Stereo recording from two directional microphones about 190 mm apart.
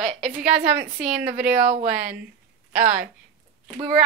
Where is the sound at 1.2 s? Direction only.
50° right (ahead or behind).